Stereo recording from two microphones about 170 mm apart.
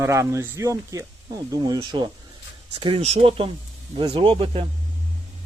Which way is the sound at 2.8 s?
35° right (ahead or behind).